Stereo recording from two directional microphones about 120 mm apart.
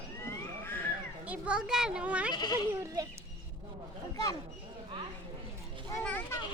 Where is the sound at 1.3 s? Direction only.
10° right (ahead or behind).